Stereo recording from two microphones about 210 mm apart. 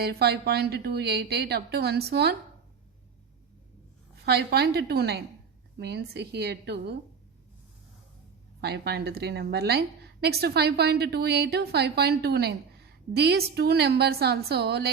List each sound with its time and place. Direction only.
0.0 s a woman's voice: 50° right (ahead or behind)
4.3 s a woman's voice: 50° right (ahead or behind)
8.6 s a woman's voice: 50° right (ahead or behind)